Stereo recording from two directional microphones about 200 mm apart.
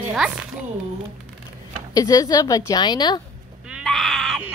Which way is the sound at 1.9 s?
15° left (ahead or behind).